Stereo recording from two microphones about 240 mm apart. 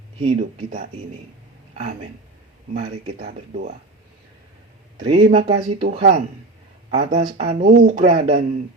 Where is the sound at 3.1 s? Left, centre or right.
Right.